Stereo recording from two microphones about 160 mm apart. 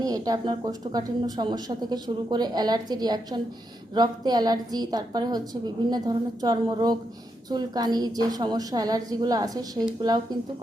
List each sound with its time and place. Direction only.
0.0 s speech: 25° right (ahead or behind)